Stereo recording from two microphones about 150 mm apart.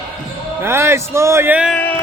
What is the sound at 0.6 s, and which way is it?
A man's voice, 15° right (ahead or behind).